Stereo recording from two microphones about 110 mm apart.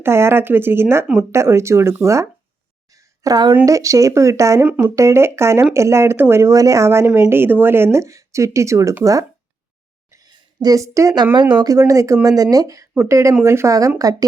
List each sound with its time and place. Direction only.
0.0 s speech: 20° right (ahead or behind)
3.2 s speech: 40° right (ahead or behind)
10.2 s a sound: 35° right (ahead or behind)
11.5 s speech: 35° right (ahead or behind)